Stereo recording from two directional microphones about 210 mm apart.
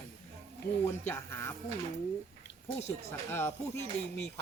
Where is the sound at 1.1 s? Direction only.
10° left (ahead or behind).